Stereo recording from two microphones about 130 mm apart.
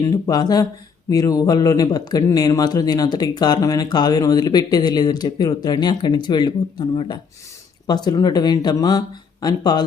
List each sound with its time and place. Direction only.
0.1 s speech: 30° left (ahead or behind)